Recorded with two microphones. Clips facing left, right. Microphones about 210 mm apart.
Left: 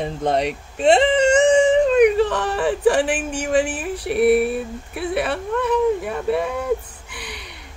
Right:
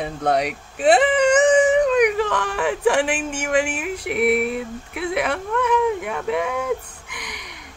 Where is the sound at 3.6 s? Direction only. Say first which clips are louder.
Left 1 dB; 15° right (ahead or behind).